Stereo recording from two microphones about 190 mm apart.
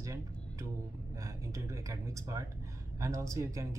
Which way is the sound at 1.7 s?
15° right (ahead or behind).